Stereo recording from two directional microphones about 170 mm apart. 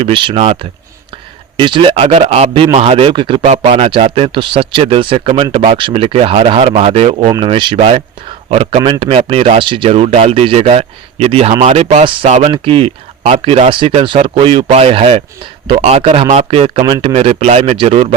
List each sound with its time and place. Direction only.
0.0 s speech: 30° right (ahead or behind)
3.4 s speech: 40° right (ahead or behind)